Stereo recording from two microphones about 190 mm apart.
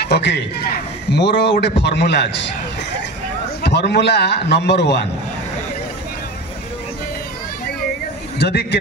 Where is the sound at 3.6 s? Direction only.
60° left (ahead or behind).